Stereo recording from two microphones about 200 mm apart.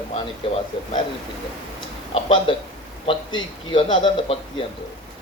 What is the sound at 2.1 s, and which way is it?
A man's voice, 25° left (ahead or behind).